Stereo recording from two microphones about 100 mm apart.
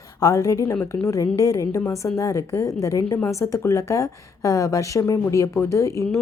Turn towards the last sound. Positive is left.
turn(degrees=30)  # may be behind; listen again after turning